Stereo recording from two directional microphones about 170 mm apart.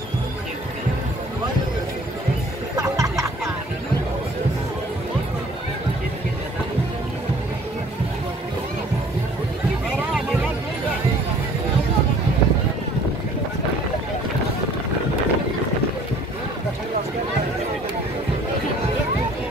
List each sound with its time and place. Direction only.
2.7 s music: 20° right (ahead or behind)